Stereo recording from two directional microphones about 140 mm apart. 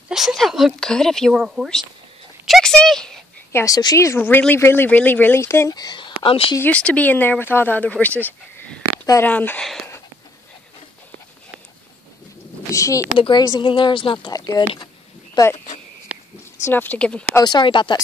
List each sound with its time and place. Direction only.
0.1 s speech: centre (ahead or behind)
2.4 s a sound: centre (ahead or behind)
3.5 s speech: 25° left (ahead or behind); by 6.5 s 40° left (ahead or behind)
6.6 s speech: 10° left (ahead or behind)
12.7 s speech: 20° left (ahead or behind)
16.6 s speech: 15° left (ahead or behind)
17.4 s speech: 30° left (ahead or behind)